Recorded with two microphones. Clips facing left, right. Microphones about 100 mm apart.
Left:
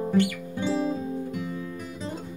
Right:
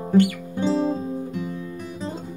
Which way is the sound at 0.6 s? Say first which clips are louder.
Right 5 dB; 25° right (ahead or behind).